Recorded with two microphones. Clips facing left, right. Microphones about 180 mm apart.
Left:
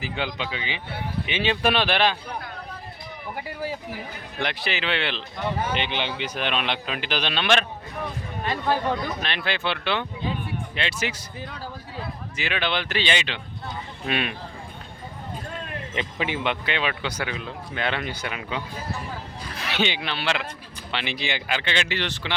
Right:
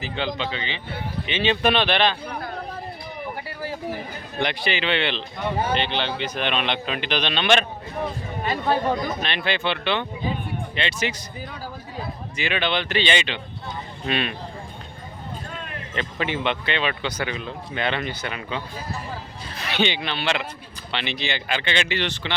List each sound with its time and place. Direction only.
0.0 s speech: 10° left (ahead or behind)
4.4 s speech: centre (ahead or behind)
8.9 s a man's voice: 20° right (ahead or behind)
9.2 s speech: centre (ahead or behind)
16.0 s speech: 10° left (ahead or behind)